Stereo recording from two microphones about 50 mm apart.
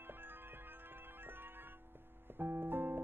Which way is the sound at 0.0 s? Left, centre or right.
Right.